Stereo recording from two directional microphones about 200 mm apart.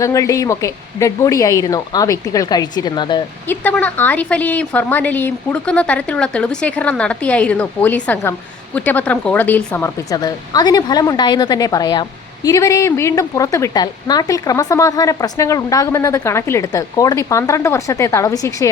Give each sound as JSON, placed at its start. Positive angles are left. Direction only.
{"t": 0.0, "sound": "a woman's voice", "side_deg": 15}
{"t": 3.5, "sound": "a woman's voice", "side_deg": 10}